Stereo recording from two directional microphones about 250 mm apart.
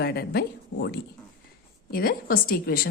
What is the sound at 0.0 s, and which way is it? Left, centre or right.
A woman's voice, left.